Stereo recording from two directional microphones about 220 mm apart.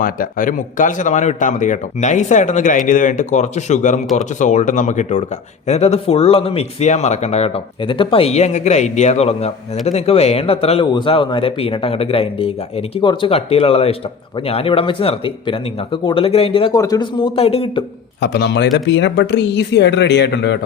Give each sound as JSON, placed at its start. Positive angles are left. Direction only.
{"t": 0.0, "sound": "speech", "side_deg": 40}
{"t": 18.2, "sound": "speech", "side_deg": 50}